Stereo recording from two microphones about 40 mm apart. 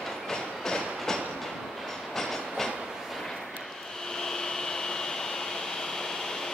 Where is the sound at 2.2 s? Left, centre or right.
Centre.